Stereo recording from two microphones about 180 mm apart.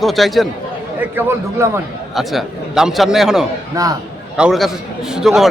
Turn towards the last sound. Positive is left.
turn(degrees=-5)  # may be behind; listen again after turning